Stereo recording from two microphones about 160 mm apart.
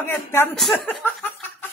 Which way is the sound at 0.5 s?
Centre (ahead or behind).